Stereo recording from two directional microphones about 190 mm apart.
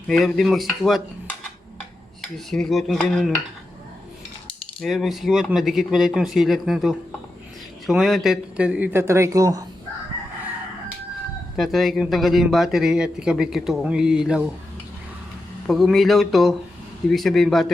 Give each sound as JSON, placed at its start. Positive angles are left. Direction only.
{"t": 0.1, "sound": "speech", "side_deg": 0}
{"t": 4.8, "sound": "speech", "side_deg": 0}
{"t": 11.5, "sound": "speech", "side_deg": 0}
{"t": 15.6, "sound": "speech", "side_deg": 0}